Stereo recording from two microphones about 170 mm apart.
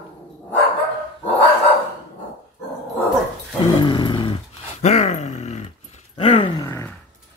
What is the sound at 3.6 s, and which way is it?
Dog, 30° left (ahead or behind).